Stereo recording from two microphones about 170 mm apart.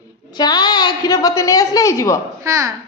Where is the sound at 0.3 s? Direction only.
25° left (ahead or behind).